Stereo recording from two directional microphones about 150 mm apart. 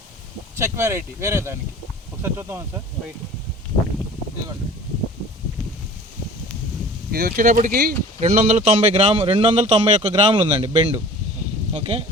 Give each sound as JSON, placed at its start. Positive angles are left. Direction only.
{"t": 0.5, "sound": "speech", "side_deg": -20}
{"t": 7.1, "sound": "speech", "side_deg": -90}
{"t": 8.2, "sound": "speech", "side_deg": -60}
{"t": 9.0, "sound": "a man's voice", "side_deg": -40}